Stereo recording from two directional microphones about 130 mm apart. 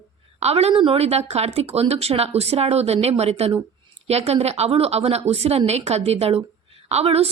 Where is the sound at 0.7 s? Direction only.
45° right (ahead or behind).